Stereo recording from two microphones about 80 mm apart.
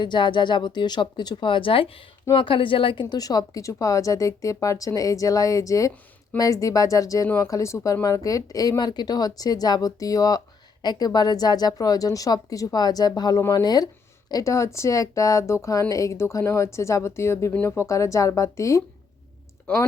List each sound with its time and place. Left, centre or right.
0.0 s a woman's voice: left
3.2 s speech: left
8.8 s speech: left
19.7 s speech: centre